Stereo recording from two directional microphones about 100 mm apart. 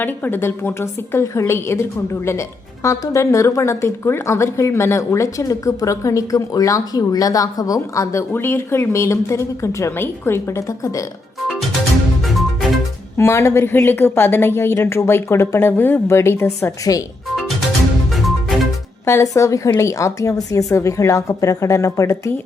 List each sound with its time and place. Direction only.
0.0 s a woman's voice: 20° left (ahead or behind); by 8.2 s 35° left (ahead or behind)
8.3 s speech: 25° left (ahead or behind)
13.1 s speech: 25° left (ahead or behind)
18.1 s music: centre (ahead or behind)
19.0 s a woman's voice: 30° left (ahead or behind)